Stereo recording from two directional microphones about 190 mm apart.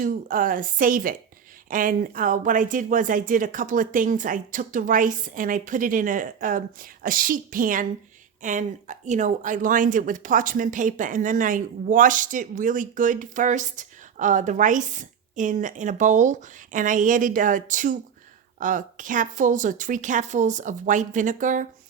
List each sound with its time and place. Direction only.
0.0 s speech: 45° right (ahead or behind)